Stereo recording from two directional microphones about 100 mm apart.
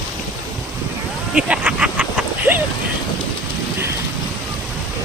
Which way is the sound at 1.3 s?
10° right (ahead or behind).